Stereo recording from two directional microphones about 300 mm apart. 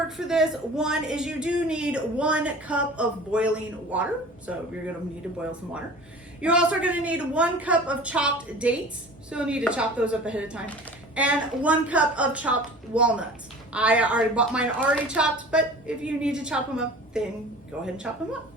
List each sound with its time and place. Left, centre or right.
0.3 s speech: centre